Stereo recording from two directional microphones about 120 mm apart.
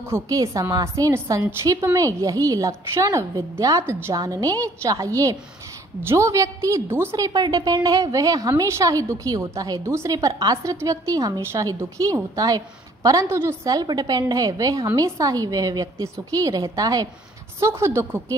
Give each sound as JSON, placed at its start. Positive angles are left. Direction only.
{"t": 0.0, "sound": "a woman's voice", "side_deg": -25}
{"t": 7.2, "sound": "a woman's voice", "side_deg": -30}